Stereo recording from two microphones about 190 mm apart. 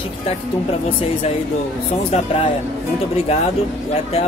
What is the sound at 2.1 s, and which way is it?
Speech, 30° left (ahead or behind).